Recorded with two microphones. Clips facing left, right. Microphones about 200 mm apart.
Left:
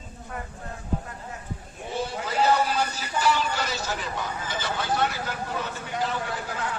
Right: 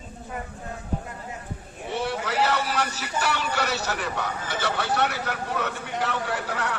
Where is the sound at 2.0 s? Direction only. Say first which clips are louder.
Right 1 dB; 80° right.